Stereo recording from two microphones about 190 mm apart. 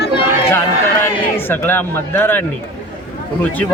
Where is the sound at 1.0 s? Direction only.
10° left (ahead or behind).